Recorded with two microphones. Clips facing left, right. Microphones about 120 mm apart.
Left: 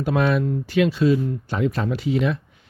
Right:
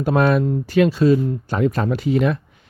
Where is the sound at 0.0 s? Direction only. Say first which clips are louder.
Right 4 dB; 45° right (ahead or behind).